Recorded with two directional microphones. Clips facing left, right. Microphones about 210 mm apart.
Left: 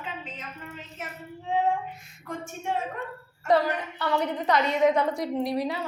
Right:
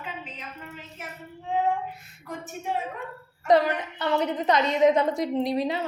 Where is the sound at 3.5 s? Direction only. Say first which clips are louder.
Right 2 dB; 20° right (ahead or behind).